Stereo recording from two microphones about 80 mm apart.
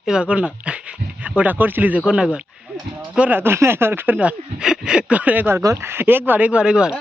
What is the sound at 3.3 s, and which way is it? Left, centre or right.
Speech, right.